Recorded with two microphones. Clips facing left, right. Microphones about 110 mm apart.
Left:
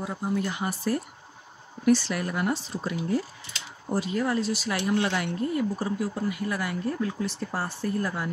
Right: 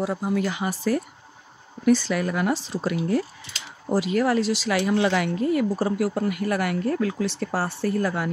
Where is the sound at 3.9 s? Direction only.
85° right.